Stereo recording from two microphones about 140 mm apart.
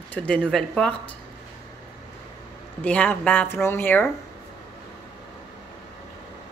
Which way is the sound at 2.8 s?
10° left (ahead or behind).